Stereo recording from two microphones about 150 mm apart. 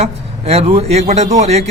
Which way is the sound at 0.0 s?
45° right (ahead or behind).